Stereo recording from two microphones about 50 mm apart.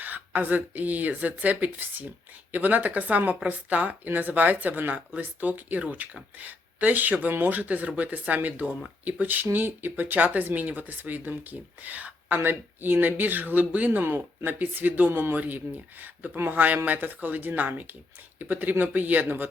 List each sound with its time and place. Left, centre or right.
0.0 s speech: right
12.4 s speech: right
15.1 s a man's voice: right
15.4 s speech: right